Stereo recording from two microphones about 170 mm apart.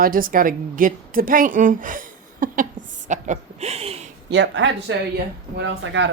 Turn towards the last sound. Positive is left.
turn(degrees=-90)